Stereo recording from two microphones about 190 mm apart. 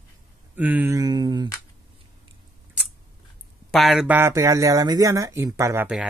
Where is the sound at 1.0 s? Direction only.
20° right (ahead or behind).